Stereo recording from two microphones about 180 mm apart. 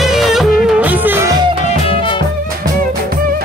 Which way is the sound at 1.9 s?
30° left (ahead or behind).